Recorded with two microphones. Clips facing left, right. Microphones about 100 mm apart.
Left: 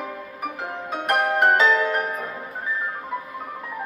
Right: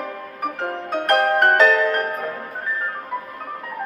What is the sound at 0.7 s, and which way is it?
Music, 5° left (ahead or behind).